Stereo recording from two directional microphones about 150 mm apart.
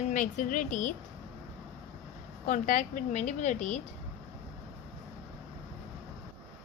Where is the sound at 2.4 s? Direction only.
60° left (ahead or behind).